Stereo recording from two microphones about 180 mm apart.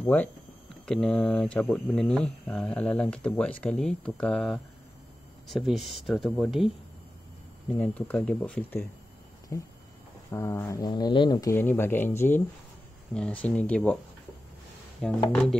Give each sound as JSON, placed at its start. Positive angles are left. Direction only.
{"t": 0.0, "sound": "speech", "side_deg": 10}
{"t": 7.7, "sound": "speech", "side_deg": 5}
{"t": 15.0, "sound": "speech", "side_deg": 5}